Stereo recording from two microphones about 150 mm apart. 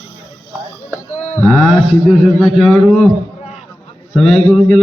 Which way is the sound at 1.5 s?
5° right (ahead or behind).